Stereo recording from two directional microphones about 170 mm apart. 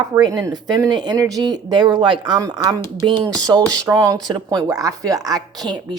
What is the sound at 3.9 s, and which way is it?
Speech, 20° right (ahead or behind).